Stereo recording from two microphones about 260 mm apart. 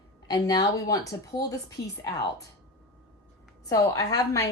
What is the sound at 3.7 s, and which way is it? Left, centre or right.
Speech, centre.